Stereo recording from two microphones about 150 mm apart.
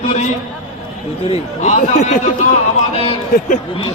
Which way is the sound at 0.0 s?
50° left (ahead or behind).